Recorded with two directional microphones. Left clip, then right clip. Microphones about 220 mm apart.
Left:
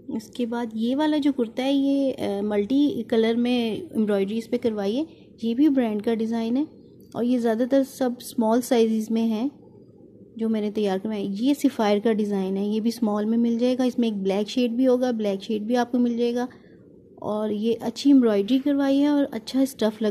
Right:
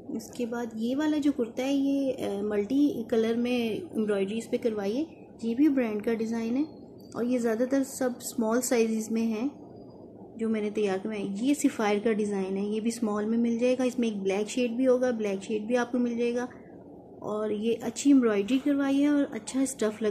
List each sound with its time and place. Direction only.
0.4 s speech: 40° left (ahead or behind)